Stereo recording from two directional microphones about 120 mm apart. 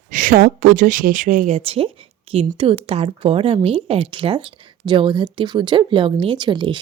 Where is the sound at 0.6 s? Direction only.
90° right.